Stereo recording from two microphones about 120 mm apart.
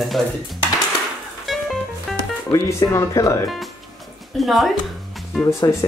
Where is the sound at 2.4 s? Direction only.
30° left (ahead or behind).